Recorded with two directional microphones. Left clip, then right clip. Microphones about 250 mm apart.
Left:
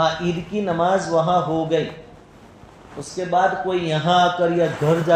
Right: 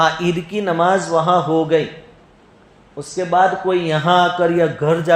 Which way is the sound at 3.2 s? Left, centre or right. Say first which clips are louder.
Right 4 dB; right.